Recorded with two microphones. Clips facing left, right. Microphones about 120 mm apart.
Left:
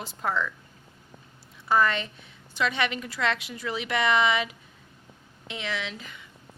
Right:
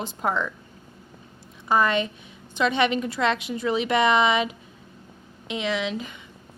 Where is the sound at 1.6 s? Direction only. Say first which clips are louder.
Right 2 dB; 20° right (ahead or behind).